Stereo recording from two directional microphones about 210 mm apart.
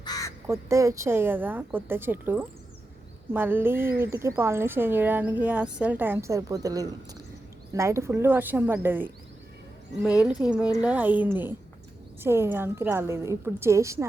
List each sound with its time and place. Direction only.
0.0 s crow: 15° left (ahead or behind)
0.4 s speech: 15° right (ahead or behind)
10.2 s a woman's voice: 5° right (ahead or behind)